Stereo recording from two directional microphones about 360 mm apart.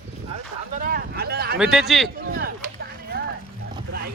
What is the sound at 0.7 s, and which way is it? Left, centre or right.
Speech, right.